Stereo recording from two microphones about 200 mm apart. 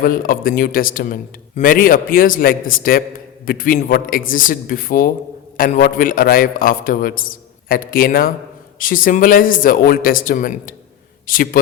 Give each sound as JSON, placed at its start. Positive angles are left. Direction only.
{"t": 0.0, "sound": "a man's voice", "side_deg": 45}